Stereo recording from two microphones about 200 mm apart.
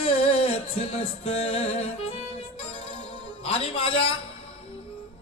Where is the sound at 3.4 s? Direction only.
30° left (ahead or behind).